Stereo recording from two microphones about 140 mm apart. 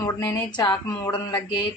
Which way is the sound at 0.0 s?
25° left (ahead or behind).